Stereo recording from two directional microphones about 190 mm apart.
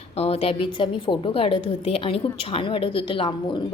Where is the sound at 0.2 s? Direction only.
30° left (ahead or behind).